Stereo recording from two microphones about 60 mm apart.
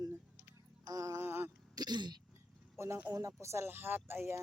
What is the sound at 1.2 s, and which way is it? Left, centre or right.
Speech, right.